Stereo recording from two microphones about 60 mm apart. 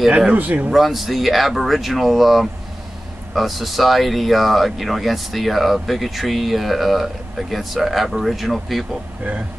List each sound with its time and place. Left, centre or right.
0.3 s speech: right
0.7 s speech: centre